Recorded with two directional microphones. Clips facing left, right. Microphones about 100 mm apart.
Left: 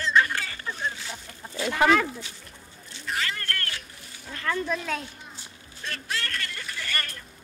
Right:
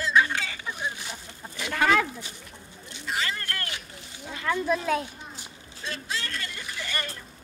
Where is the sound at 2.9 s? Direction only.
20° right (ahead or behind).